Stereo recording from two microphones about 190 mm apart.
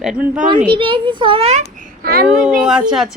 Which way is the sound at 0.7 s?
25° right (ahead or behind).